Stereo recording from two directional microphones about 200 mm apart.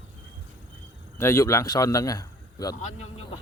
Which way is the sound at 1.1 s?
15° left (ahead or behind).